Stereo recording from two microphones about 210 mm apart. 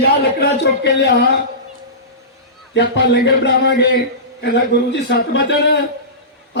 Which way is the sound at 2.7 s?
55° left (ahead or behind).